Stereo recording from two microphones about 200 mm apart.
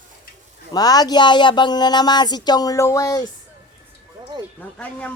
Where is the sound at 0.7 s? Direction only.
20° left (ahead or behind).